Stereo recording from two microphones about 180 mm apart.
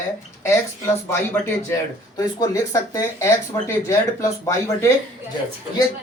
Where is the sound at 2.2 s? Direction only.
20° left (ahead or behind).